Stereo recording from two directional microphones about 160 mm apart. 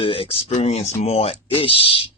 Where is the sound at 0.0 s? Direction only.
35° left (ahead or behind).